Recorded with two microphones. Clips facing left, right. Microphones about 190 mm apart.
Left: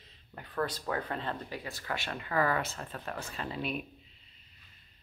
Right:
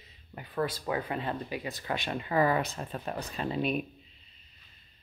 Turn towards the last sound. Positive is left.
turn(degrees=-20)  # may be behind; listen again after turning